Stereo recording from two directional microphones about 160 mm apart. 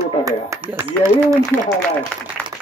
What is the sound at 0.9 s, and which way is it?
Speech, 10° left (ahead or behind).